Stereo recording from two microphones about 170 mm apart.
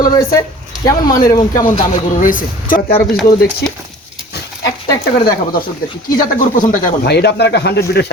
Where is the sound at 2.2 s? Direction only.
50° left (ahead or behind).